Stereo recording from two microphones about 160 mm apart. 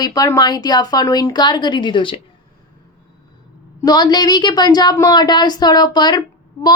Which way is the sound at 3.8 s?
25° left (ahead or behind).